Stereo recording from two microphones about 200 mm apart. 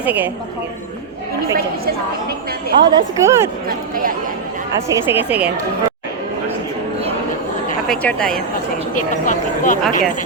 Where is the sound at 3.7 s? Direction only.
45° right (ahead or behind).